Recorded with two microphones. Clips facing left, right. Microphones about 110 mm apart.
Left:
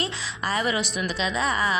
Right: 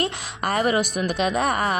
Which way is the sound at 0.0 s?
50° right (ahead or behind).